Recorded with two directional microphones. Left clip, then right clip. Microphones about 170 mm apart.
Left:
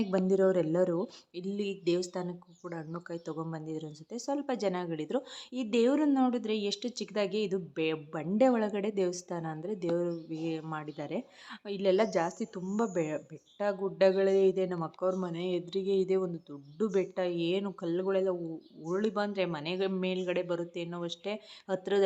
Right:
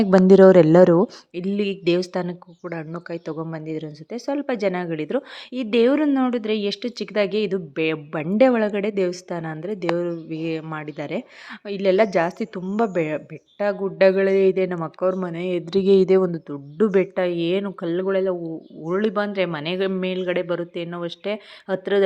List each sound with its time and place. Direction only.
0.3 s speech: 50° right (ahead or behind)
1.0 s speech: 35° right (ahead or behind)
15.6 s speech: 45° right (ahead or behind); by 22.0 s 20° right (ahead or behind)